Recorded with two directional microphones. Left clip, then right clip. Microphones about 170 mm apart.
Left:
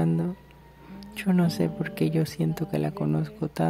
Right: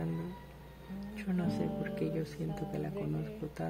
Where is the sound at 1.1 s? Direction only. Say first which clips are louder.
Left 10 dB; 45° left (ahead or behind).